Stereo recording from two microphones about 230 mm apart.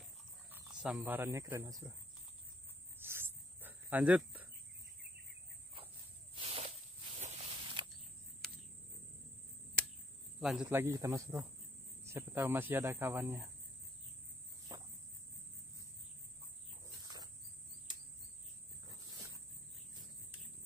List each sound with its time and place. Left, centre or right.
0.5 s cricket: centre
0.9 s speech: centre
3.0 s a sound: centre
6.3 s cricket: right
7.2 s walk: right
10.4 s speech: centre
16.8 s dog: centre